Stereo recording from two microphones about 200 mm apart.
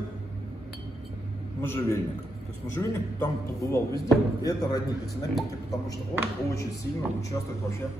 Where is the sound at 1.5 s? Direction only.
10° left (ahead or behind).